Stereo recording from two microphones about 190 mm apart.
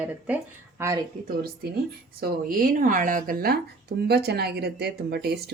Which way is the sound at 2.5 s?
45° right (ahead or behind).